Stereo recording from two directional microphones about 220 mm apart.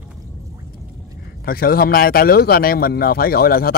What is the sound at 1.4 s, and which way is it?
Speech, 40° left (ahead or behind).